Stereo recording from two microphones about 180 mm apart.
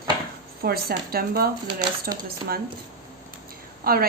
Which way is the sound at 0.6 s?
60° right (ahead or behind).